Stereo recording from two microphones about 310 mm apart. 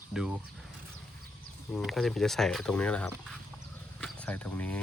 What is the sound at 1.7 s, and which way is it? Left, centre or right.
Speech, centre.